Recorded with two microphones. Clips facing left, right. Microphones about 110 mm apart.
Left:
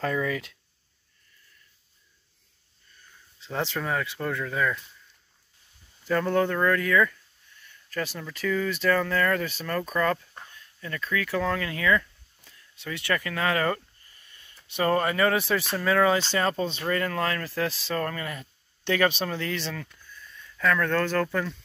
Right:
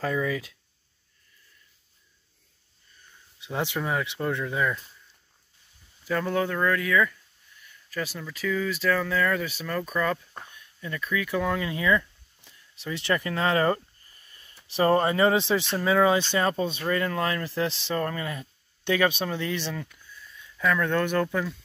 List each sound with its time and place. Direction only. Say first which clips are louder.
0.0 s speech: even; 10° right (ahead or behind)
3.3 s speech: right 1 dB; 15° right (ahead or behind)
6.0 s speech: left 2 dB; 5° right (ahead or behind)
10.5 s a sound: even; 15° right (ahead or behind); by 14.6 s 35° right (ahead or behind)
14.7 s speech: right 3 dB; 30° right (ahead or behind); by 21.6 s 5° right (ahead or behind)